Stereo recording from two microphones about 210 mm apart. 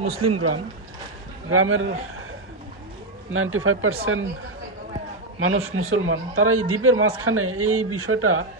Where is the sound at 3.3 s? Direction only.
75° right (ahead or behind).